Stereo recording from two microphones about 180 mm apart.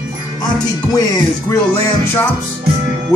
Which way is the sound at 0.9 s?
20° left (ahead or behind).